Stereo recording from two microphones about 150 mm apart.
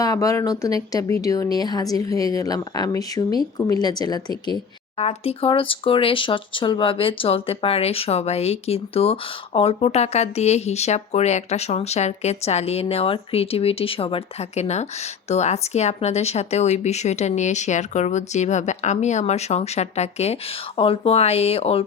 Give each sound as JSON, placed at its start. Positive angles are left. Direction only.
{"t": 0.0, "sound": "speech", "side_deg": 25}
{"t": 4.9, "sound": "speech", "side_deg": 40}